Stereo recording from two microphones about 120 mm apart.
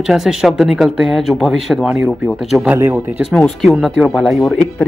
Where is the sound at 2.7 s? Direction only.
15° right (ahead or behind).